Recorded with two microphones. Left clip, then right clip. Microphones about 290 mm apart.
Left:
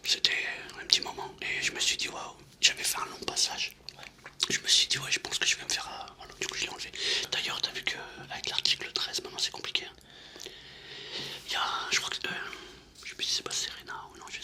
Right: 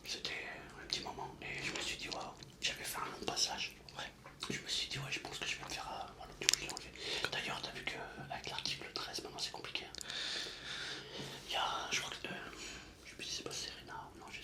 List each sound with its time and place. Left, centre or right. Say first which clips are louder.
0.0 s whispering: left 15 dB; left
11.1 s music: left 10 dB; left
11.6 s whispering: left 7 dB; left
12.0 s whispering: left 10 dB; left